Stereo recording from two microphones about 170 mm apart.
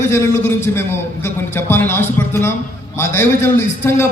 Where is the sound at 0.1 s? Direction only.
15° left (ahead or behind).